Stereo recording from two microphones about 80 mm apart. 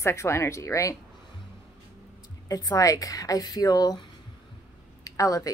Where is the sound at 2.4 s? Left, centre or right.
Left.